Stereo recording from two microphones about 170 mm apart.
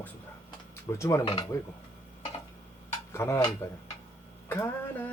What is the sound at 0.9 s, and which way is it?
Speech, 15° left (ahead or behind).